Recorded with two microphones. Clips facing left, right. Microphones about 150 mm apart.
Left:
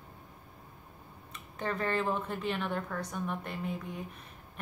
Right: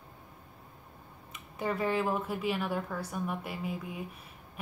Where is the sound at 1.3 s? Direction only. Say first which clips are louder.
Right 2 dB; 10° right (ahead or behind).